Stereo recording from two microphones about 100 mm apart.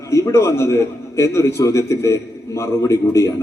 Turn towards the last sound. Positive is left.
turn(degrees=30)  # may be behind; listen again after turning